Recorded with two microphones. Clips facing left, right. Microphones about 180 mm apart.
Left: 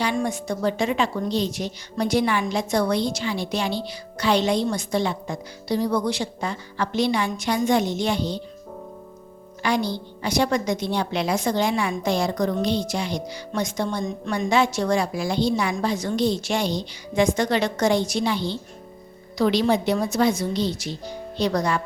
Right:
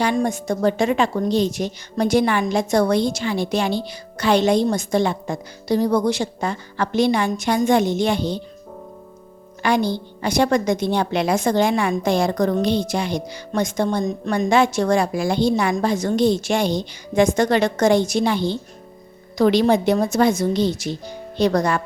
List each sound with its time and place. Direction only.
0.0 s a woman's voice: 45° right (ahead or behind)
9.6 s a woman's voice: 55° right (ahead or behind)